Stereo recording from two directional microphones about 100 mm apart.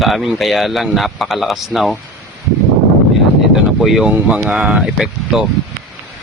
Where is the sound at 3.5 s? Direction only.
Centre (ahead or behind).